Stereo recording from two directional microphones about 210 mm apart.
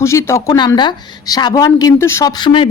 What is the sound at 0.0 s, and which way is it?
A woman's voice, 15° left (ahead or behind).